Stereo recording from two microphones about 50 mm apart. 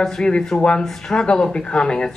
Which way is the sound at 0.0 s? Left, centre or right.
Centre.